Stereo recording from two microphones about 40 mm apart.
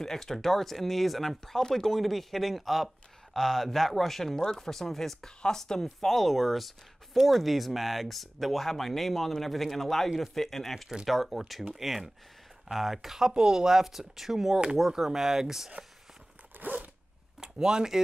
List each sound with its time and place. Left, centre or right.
0.0 s speech: centre
2.0 s speech: centre
13.3 s speech: centre
16.6 s zipper: right
17.4 s speech: centre